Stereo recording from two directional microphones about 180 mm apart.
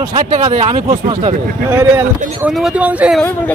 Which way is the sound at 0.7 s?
25° right (ahead or behind).